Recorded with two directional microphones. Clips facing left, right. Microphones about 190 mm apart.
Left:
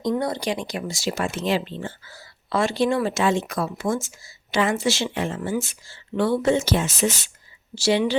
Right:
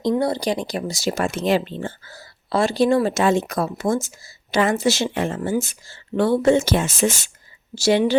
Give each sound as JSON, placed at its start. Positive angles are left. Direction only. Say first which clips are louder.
{"t": 0.2, "sound": "speech", "louder": "right 4 dB", "side_deg": -35}